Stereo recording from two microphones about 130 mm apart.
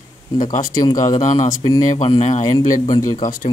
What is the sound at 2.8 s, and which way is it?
Speech, 35° left (ahead or behind).